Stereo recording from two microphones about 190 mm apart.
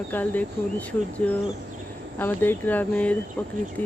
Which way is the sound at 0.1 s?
10° left (ahead or behind).